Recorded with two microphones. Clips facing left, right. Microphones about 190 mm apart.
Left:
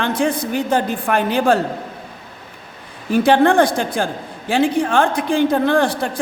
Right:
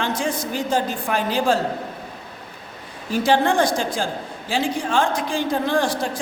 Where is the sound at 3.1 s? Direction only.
60° left (ahead or behind).